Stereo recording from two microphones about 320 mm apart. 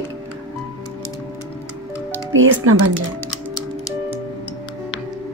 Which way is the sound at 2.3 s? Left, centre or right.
Right.